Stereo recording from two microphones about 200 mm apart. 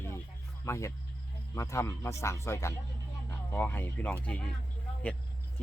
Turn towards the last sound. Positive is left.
turn(degrees=5)  # may be behind; listen again after turning